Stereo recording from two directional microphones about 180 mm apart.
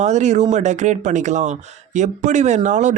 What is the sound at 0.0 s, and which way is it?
Speech, 40° right (ahead or behind).